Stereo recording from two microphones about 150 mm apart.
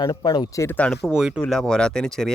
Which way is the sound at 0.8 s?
5° left (ahead or behind).